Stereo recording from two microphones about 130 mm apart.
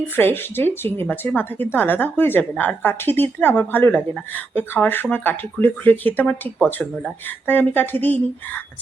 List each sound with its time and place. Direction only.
0.2 s a woman's voice: 15° left (ahead or behind)